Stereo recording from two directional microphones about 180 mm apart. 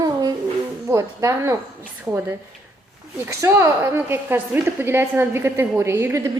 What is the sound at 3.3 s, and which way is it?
A woman's voice, 15° right (ahead or behind).